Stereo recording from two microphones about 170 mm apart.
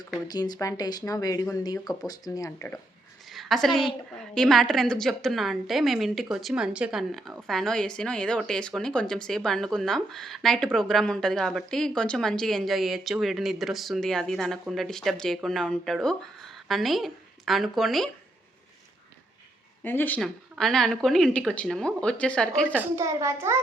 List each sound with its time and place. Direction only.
0.3 s speech: 25° left (ahead or behind)
3.2 s a woman's voice: centre (ahead or behind)
19.8 s a woman's voice: 10° left (ahead or behind)
23.0 s a child's voice: 15° right (ahead or behind)